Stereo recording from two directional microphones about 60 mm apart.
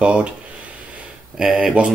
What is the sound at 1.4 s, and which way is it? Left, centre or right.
Speech, centre.